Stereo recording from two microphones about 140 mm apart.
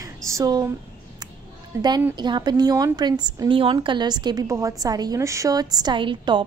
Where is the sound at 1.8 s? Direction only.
30° right (ahead or behind).